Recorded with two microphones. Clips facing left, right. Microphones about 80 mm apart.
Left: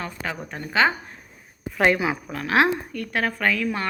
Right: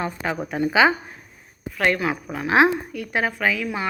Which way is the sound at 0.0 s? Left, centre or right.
Centre.